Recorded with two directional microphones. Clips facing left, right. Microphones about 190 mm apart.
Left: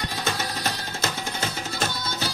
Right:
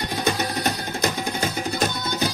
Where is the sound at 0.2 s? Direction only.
15° right (ahead or behind).